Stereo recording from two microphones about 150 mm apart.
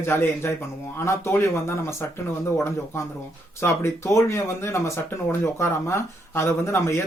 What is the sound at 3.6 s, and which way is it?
Speech, 20° left (ahead or behind).